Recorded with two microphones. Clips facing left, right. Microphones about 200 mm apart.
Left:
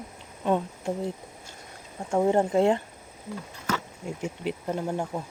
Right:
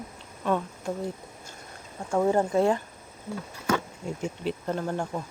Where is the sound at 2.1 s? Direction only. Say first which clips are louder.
Left 1 dB; 25° left (ahead or behind).